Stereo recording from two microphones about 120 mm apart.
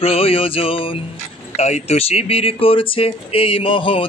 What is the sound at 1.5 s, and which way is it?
A man's voice, 65° left (ahead or behind).